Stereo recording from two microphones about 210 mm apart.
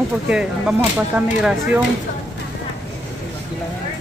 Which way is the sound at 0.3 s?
5° right (ahead or behind).